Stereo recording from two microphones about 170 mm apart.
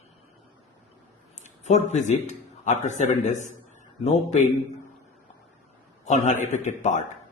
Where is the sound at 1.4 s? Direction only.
45° left (ahead or behind).